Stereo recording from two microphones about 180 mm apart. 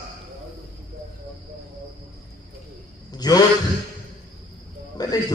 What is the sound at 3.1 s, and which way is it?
Speech, 20° left (ahead or behind).